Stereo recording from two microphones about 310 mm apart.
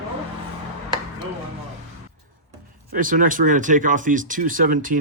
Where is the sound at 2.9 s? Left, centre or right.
Right.